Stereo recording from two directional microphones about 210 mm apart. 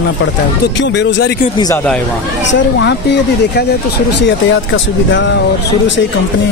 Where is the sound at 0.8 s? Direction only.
55° left (ahead or behind).